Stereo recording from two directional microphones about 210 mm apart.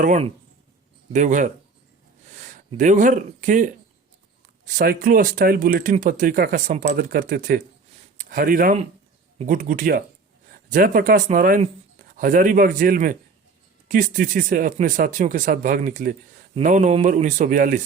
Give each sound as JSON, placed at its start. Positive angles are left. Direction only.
{"t": 0.0, "sound": "speech", "side_deg": -35}